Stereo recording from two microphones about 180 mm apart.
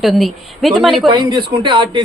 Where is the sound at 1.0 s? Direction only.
25° right (ahead or behind).